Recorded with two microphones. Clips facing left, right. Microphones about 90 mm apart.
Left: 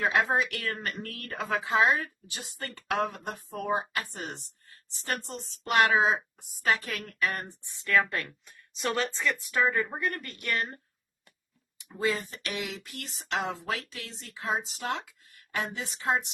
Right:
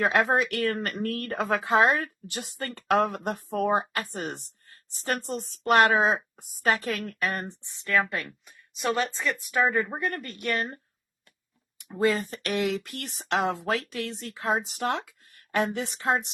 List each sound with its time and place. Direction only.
0.0 s speech: 50° right (ahead or behind); by 7.5 s 35° right (ahead or behind)
7.6 s speech: 20° right (ahead or behind)
8.4 s a sound: 5° right (ahead or behind)
9.0 s speech: 20° right (ahead or behind)
11.8 s speech: 55° right (ahead or behind)